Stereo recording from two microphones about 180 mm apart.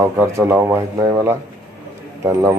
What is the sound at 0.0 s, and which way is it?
A man's voice, 15° right (ahead or behind).